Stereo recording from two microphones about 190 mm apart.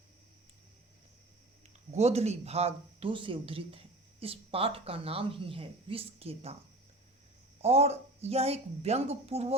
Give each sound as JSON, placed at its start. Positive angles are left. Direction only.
{"t": 1.9, "sound": "speech", "side_deg": -35}
{"t": 7.6, "sound": "speech", "side_deg": -35}